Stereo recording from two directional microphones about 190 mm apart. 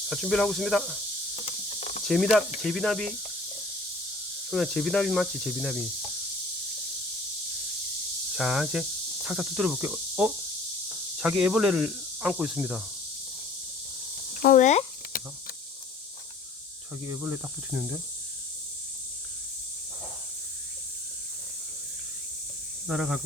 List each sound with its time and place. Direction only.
0.1 s speech: centre (ahead or behind)
2.0 s speech: centre (ahead or behind)
4.5 s speech: 5° left (ahead or behind)
8.4 s speech: centre (ahead or behind)
14.3 s a sound: 45° left (ahead or behind)
17.1 s speech: 10° right (ahead or behind)
22.9 s speech: 5° right (ahead or behind)